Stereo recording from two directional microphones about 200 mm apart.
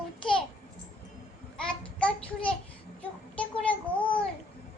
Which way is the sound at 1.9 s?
5° left (ahead or behind).